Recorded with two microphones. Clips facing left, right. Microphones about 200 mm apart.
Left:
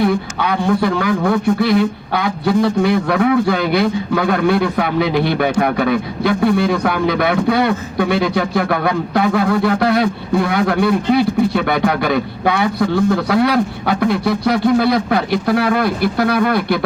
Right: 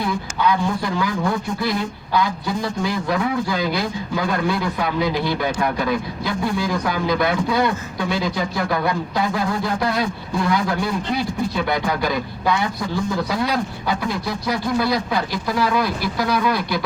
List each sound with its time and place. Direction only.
0.0 s a man's voice: 65° left (ahead or behind)